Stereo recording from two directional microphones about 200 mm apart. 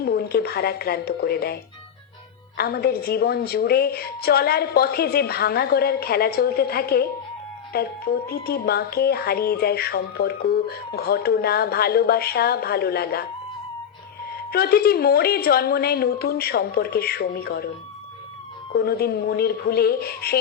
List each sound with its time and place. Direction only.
0.0 s music: 50° left (ahead or behind)
2.6 s music: 50° left (ahead or behind)
14.5 s music: 50° left (ahead or behind)
18.7 s music: 50° left (ahead or behind)